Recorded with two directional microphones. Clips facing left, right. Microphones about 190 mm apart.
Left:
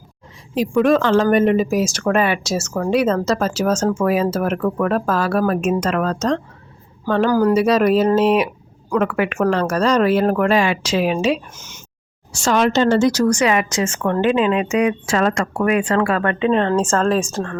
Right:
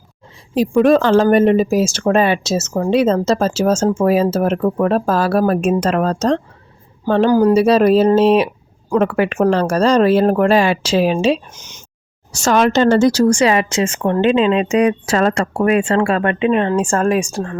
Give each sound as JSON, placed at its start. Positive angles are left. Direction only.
{"t": 0.5, "sound": "speech", "side_deg": -35}
{"t": 12.3, "sound": "speech", "side_deg": -45}